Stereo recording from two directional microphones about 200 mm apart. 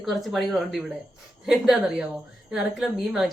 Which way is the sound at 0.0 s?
Centre (ahead or behind).